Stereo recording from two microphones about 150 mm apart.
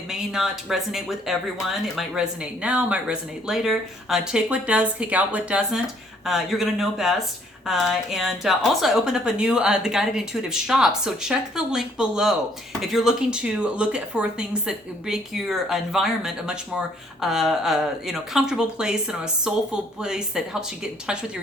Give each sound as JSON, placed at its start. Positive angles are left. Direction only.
{"t": 0.1, "sound": "speech", "side_deg": 0}